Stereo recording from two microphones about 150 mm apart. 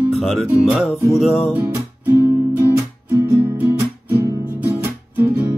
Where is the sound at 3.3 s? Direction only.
15° right (ahead or behind).